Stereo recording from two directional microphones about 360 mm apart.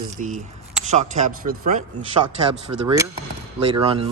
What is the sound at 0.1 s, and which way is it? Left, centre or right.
Speech, right.